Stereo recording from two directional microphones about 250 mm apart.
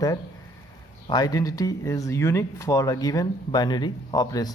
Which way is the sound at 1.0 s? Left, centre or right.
Centre.